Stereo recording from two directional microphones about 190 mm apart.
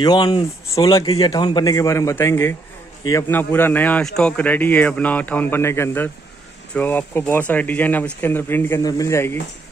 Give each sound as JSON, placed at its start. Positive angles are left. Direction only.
{"t": 0.0, "sound": "a man's voice", "side_deg": 20}